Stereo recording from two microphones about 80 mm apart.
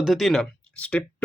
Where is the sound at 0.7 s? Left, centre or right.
Centre.